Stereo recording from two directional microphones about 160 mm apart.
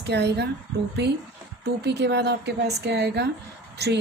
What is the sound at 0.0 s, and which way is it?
Speech, 90° right.